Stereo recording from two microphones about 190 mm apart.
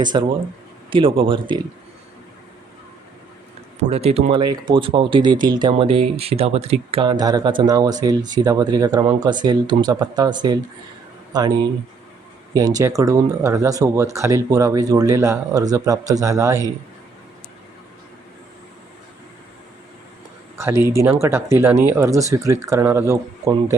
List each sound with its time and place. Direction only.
0.0 s speech: 25° right (ahead or behind)
3.8 s speech: 35° right (ahead or behind); by 16.7 s 15° right (ahead or behind)
20.6 s speech: 15° right (ahead or behind)